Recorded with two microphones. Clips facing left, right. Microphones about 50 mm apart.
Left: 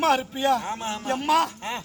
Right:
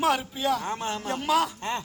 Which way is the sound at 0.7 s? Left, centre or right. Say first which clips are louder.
Left 2 dB; left.